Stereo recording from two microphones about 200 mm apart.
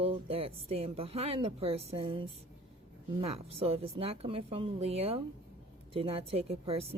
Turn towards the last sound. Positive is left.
turn(degrees=-30)  # may be behind; listen again after turning